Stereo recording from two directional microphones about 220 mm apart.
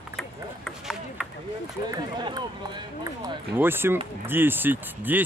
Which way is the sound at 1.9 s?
20° right (ahead or behind).